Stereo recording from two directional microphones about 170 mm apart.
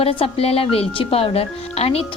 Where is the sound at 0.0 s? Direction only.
35° left (ahead or behind).